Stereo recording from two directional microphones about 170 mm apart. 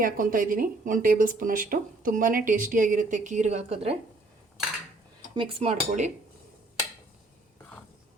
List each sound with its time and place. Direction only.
0.0 s speech: 55° right (ahead or behind); by 3.9 s 40° right (ahead or behind)
5.3 s speech: 30° right (ahead or behind)